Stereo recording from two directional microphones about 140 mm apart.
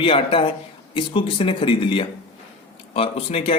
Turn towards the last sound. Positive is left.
turn(degrees=45)  # may be behind; listen again after turning